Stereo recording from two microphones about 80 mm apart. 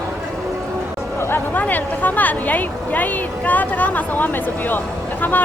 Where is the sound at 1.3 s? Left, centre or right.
Left.